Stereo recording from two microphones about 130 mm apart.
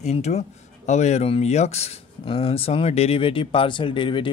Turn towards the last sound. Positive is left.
turn(degrees=40)  # may be behind; listen again after turning